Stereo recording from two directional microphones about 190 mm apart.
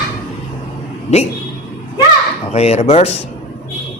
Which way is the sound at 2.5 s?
35° left (ahead or behind).